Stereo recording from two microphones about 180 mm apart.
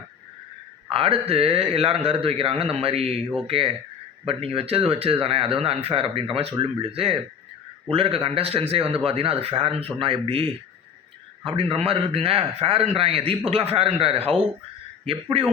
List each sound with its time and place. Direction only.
0.9 s a man's voice: 30° right (ahead or behind)
11.7 s a man's voice: 30° right (ahead or behind)